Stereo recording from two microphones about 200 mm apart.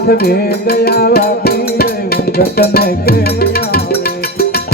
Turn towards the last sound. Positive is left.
turn(degrees=50)  # may be behind; listen again after turning